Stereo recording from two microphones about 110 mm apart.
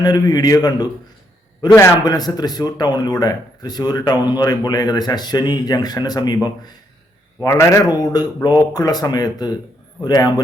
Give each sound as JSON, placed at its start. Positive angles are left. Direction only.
{"t": 0.0, "sound": "speech", "side_deg": 40}